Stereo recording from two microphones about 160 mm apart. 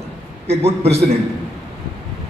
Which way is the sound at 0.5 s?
40° right (ahead or behind).